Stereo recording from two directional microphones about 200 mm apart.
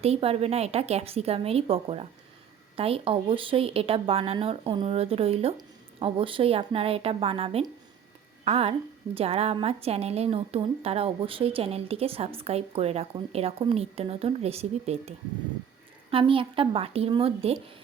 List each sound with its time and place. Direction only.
0.0 s a woman's voice: 30° right (ahead or behind)